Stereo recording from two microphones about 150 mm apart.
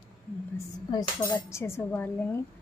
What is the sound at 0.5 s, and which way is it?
A woman's voice, 20° left (ahead or behind).